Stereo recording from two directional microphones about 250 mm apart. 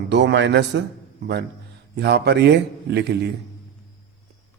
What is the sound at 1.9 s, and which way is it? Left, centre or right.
A man's voice, right.